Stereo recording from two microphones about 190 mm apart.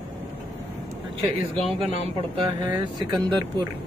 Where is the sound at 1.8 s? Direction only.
30° right (ahead or behind).